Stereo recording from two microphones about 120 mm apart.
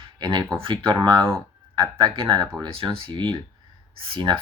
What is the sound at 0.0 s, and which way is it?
Speech, 40° right (ahead or behind).